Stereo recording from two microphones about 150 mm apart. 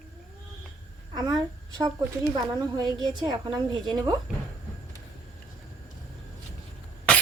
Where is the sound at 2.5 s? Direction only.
25° right (ahead or behind).